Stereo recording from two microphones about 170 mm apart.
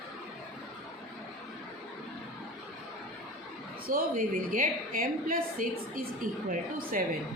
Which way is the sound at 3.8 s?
55° right (ahead or behind).